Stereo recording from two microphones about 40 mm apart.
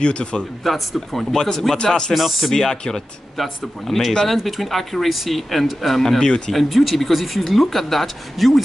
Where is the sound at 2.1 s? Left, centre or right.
Centre.